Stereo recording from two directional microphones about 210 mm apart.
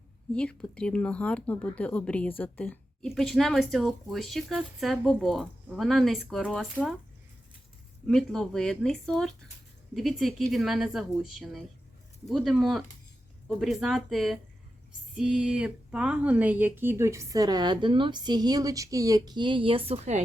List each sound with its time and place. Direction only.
0.3 s speech: 5° left (ahead or behind)
8.0 s speech: 5° left (ahead or behind); by 20.2 s 30° right (ahead or behind)